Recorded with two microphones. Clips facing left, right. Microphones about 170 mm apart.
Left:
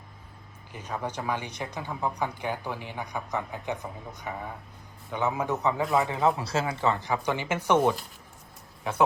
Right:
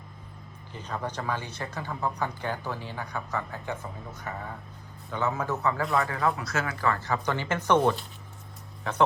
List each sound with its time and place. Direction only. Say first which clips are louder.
0.7 s speech: left 1 dB; 10° left (ahead or behind)